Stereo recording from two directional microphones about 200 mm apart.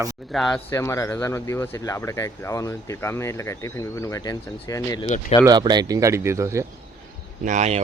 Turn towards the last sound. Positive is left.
turn(degrees=-35)  # may be behind; listen again after turning